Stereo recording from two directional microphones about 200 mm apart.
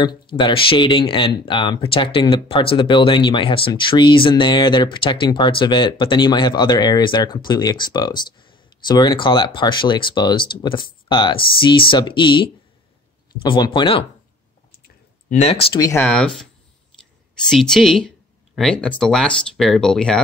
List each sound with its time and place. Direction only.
0.0 s speech: 25° left (ahead or behind)
15.2 s speech: 30° left (ahead or behind)
16.1 s speech: 5° left (ahead or behind)